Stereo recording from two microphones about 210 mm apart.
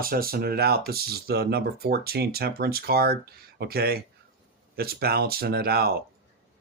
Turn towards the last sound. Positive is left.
turn(degrees=-45)  # may be behind; listen again after turning